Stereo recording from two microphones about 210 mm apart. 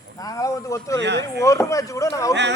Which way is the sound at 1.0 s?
55° right (ahead or behind).